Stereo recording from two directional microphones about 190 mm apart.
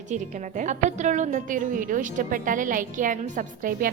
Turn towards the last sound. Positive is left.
turn(degrees=-50)  # may be behind; listen again after turning